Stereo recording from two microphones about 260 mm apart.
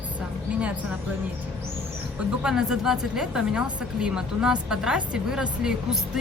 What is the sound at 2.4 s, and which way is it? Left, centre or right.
A woman's voice, centre.